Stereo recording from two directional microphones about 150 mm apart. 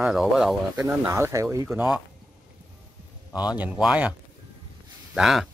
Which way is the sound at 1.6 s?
5° right (ahead or behind).